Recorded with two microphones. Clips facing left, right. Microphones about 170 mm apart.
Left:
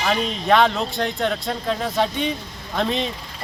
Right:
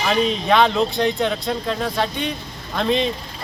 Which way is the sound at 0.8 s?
15° right (ahead or behind).